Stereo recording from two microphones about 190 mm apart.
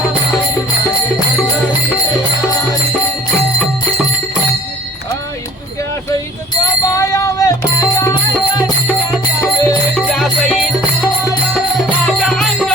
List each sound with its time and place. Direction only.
6.8 s music: 15° left (ahead or behind)
9.4 s music: 15° left (ahead or behind)
10.0 s music: centre (ahead or behind)
12.2 s music: 5° left (ahead or behind)